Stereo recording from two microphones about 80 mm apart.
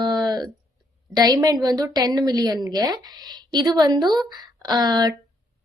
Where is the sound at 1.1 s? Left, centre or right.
Right.